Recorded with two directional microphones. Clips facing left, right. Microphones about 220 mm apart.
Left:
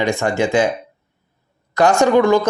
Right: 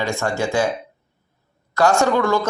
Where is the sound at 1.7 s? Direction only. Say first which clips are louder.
Left 4 dB; 20° left (ahead or behind).